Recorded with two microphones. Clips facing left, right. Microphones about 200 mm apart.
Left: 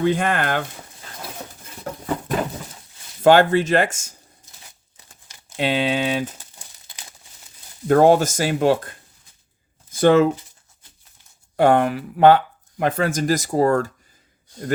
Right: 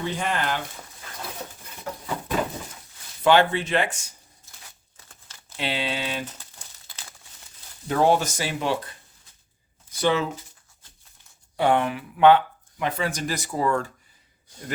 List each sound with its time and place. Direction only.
0.0 s speech: 55° left (ahead or behind)
1.9 s a sound: 50° left (ahead or behind)
3.2 s speech: 45° left (ahead or behind)
4.4 s crumpling: 20° left (ahead or behind)
5.5 s speech: 50° left (ahead or behind)
6.8 s crumpling: 20° left (ahead or behind)
7.9 s speech: 50° left (ahead or behind)
11.5 s speech: 45° left (ahead or behind)